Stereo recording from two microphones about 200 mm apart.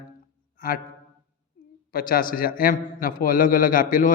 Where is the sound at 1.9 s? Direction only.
45° left (ahead or behind).